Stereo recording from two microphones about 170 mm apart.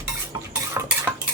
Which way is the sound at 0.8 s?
20° right (ahead or behind).